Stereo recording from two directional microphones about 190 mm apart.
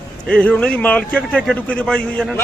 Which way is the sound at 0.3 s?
5° left (ahead or behind).